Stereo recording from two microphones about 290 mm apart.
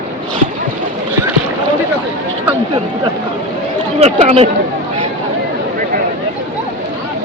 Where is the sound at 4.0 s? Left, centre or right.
Right.